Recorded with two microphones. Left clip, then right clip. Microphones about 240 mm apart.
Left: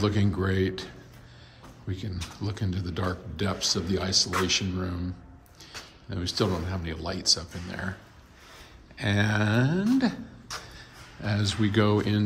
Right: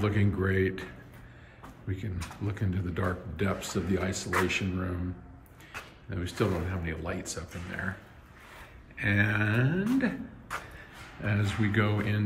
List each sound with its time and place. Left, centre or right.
0.0 s speech: centre
1.9 s speech: centre
6.0 s speech: centre
9.0 s speech: centre